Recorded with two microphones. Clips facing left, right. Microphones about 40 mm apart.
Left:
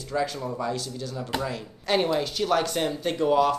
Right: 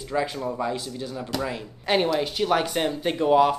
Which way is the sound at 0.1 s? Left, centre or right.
Right.